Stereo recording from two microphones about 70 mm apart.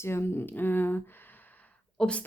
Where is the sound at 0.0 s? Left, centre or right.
Left.